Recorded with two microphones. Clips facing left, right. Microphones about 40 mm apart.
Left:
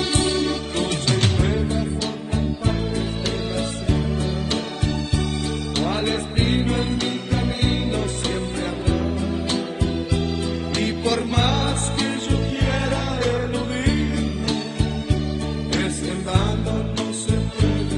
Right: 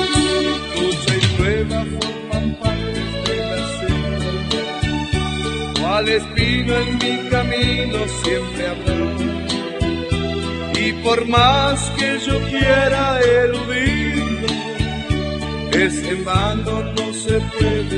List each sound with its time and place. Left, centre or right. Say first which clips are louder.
0.7 s music: right 4 dB; right
5.8 s music: right 6 dB; right
8.9 s music: right 3 dB; right
10.8 s music: right 5 dB; right
17.3 s music: right 7 dB; right